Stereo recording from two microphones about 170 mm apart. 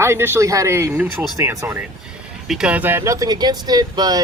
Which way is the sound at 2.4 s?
5° right (ahead or behind).